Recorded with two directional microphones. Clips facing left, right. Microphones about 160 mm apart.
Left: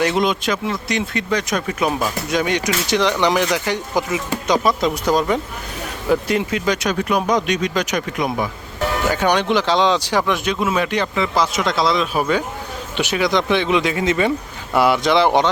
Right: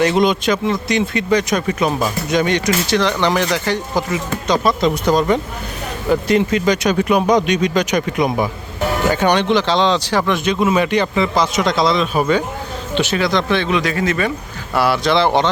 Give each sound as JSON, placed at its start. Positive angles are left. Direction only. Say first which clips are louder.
{"t": 0.0, "sound": "speech", "louder": "right 4 dB", "side_deg": 0}